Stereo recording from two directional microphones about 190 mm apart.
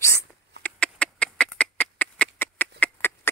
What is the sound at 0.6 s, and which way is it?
Duck, 5° left (ahead or behind).